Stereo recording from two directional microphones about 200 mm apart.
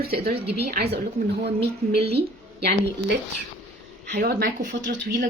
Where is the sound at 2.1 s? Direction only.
55° right (ahead or behind).